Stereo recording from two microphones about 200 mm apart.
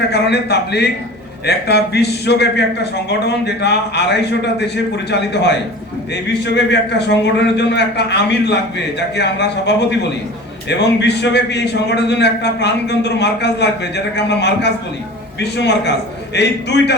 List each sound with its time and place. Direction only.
0.1 s a man's voice: 55° left (ahead or behind)